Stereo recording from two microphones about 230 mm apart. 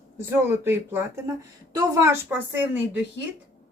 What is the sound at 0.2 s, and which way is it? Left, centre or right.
A woman's voice, centre.